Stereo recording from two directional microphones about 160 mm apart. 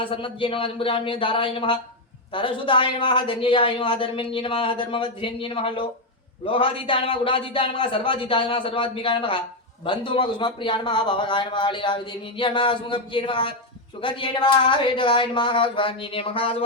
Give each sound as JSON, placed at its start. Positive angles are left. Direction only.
{"t": 0.0, "sound": "a man's voice", "side_deg": 30}